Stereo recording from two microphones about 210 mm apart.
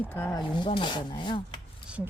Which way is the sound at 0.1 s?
10° left (ahead or behind).